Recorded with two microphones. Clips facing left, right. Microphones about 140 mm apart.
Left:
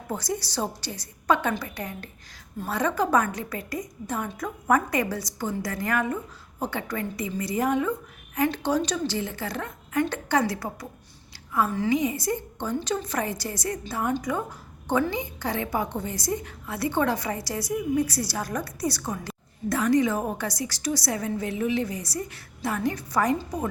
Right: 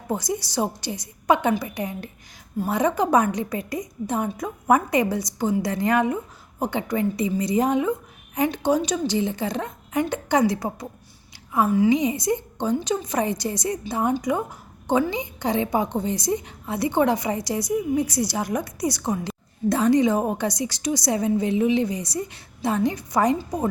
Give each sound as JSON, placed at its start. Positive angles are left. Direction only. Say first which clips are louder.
{"t": 0.1, "sound": "a woman's voice", "louder": "right 4 dB", "side_deg": -15}